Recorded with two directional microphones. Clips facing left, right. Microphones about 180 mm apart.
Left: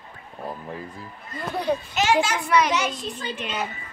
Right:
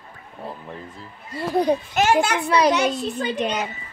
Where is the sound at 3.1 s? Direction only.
40° right (ahead or behind).